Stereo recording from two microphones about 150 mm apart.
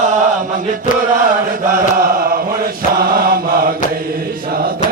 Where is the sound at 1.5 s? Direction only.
70° right (ahead or behind).